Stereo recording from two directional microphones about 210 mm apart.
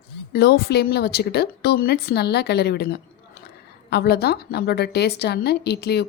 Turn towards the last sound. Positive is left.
turn(degrees=50)  # may be behind; listen again after turning